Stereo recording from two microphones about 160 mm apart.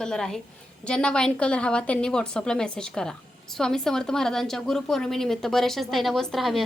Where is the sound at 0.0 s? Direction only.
5° left (ahead or behind).